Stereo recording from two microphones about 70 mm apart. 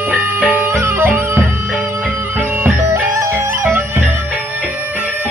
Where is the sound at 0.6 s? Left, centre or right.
Right.